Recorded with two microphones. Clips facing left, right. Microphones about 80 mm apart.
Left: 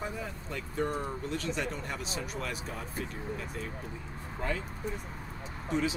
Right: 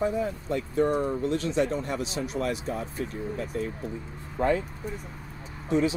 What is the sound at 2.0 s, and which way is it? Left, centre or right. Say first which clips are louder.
Speech: right 5 dB; left.